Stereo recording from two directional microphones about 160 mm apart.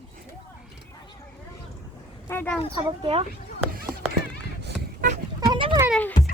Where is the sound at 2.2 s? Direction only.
15° left (ahead or behind).